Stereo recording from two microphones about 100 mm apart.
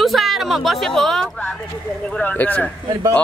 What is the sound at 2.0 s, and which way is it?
Speech, 15° left (ahead or behind).